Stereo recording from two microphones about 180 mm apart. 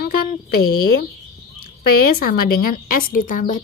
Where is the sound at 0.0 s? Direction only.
60° left (ahead or behind).